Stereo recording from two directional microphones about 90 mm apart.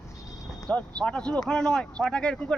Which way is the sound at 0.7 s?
10° left (ahead or behind).